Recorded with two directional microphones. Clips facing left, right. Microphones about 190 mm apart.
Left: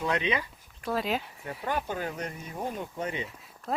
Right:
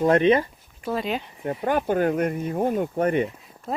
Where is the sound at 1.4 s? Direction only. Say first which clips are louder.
Right 8 dB; 50° right (ahead or behind).